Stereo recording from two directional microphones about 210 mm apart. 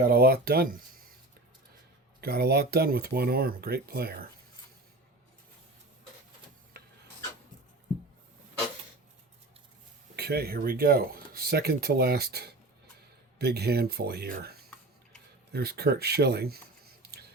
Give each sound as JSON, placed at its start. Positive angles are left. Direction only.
{"t": 0.0, "sound": "speech", "side_deg": -45}
{"t": 2.2, "sound": "speech", "side_deg": -50}
{"t": 6.8, "sound": "filing", "side_deg": -45}
{"t": 10.2, "sound": "speech", "side_deg": -50}